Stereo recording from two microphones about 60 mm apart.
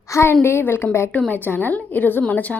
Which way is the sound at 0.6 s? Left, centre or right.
Left.